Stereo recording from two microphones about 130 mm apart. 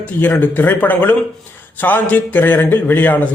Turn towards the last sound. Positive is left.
turn(degrees=15)  # may be behind; listen again after turning